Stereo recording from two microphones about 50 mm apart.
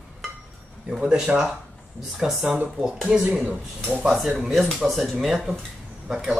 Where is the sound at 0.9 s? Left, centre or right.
Centre.